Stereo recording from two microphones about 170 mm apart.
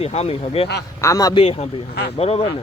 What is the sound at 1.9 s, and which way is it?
Speech, 75° left (ahead or behind).